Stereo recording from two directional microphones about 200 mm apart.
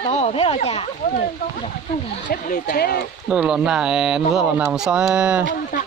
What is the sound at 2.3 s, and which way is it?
Speech, 50° left (ahead or behind).